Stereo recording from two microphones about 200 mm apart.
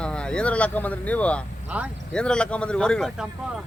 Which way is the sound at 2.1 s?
5° left (ahead or behind).